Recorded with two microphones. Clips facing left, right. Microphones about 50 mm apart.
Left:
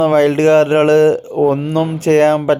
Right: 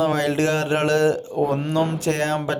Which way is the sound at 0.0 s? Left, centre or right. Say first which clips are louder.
Left 9 dB; left.